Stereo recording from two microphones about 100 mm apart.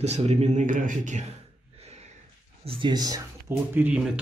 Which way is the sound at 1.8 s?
90° right.